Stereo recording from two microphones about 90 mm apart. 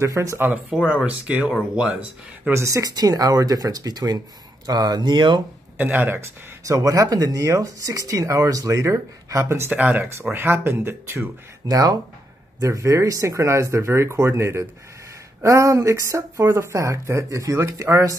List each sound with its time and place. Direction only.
0.0 s speech: 35° right (ahead or behind)
0.8 s speech: 15° right (ahead or behind)
2.5 s speech: 35° right (ahead or behind); by 5.4 s 60° right (ahead or behind)
5.8 s speech: 20° right (ahead or behind)
6.6 s speech: 40° right (ahead or behind)
9.7 s speech: 15° right (ahead or behind)
10.3 s speech: 25° right (ahead or behind)
11.6 s speech: 40° right (ahead or behind)